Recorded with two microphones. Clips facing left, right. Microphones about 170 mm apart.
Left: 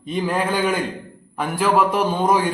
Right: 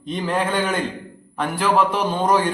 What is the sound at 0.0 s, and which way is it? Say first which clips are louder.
A man's voice: left 1 dB; 5° left (ahead or behind).